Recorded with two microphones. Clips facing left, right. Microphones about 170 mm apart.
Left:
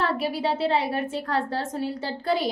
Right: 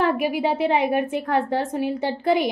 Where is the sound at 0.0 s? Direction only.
15° right (ahead or behind).